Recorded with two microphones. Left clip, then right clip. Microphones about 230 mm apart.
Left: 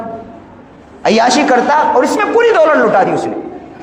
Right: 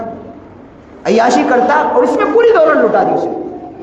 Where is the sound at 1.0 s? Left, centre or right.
Left.